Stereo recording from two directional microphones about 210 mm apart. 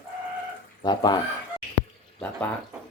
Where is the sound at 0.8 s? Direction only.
20° left (ahead or behind).